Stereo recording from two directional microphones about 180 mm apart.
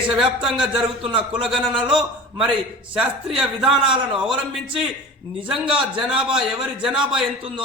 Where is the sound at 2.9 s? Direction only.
5° right (ahead or behind).